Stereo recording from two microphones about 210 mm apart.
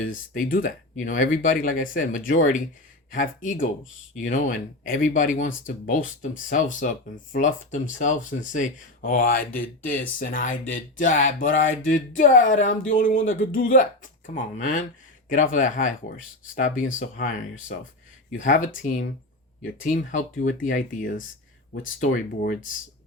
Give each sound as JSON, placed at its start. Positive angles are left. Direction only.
{"t": 0.0, "sound": "speech", "side_deg": 40}
{"t": 11.6, "sound": "a sound", "side_deg": 65}
{"t": 11.9, "sound": "speech", "side_deg": 40}